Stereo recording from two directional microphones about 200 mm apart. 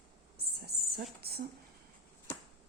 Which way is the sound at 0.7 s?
50° right (ahead or behind).